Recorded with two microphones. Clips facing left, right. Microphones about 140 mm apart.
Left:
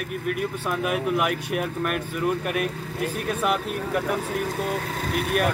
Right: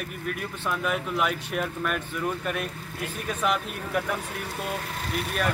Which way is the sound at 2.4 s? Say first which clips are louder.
Left 4 dB; 65° left (ahead or behind).